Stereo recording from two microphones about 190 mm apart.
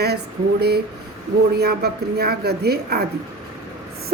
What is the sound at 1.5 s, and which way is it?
A woman's voice, 55° right (ahead or behind).